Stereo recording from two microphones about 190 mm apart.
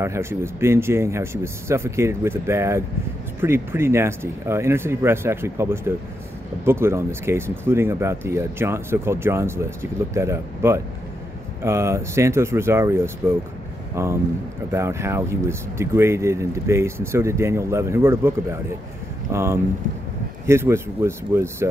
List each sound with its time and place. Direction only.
0.0 s speech: 15° right (ahead or behind)